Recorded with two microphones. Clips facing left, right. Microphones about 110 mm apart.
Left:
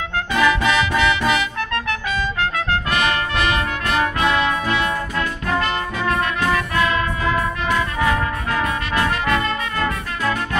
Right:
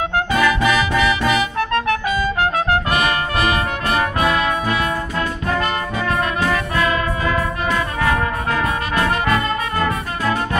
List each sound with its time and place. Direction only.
0.3 s music: 5° right (ahead or behind)
2.9 s brass instrument: 40° right (ahead or behind)
6.7 s brass instrument: 40° right (ahead or behind)
8.6 s brass instrument: 35° right (ahead or behind)